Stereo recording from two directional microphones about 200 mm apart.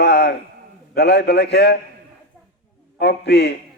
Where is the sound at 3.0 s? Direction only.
60° left (ahead or behind).